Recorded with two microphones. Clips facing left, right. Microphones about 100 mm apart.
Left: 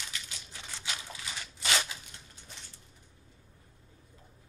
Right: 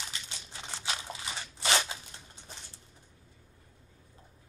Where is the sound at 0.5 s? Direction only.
30° right (ahead or behind).